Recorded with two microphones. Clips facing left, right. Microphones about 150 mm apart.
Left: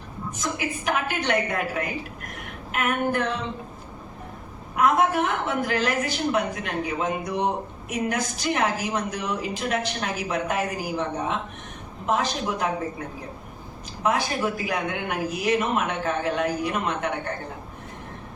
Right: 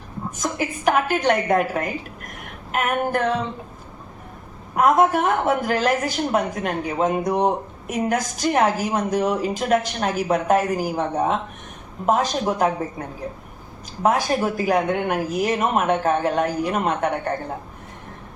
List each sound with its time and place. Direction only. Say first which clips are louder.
0.9 s a woman's voice: right 7 dB; 45° right (ahead or behind)
2.7 s a woman's voice: right 3 dB; 45° right (ahead or behind)
4.8 s a woman's voice: right 4 dB; 45° right (ahead or behind)
14.0 s a woman's voice: right 4 dB; 45° right (ahead or behind)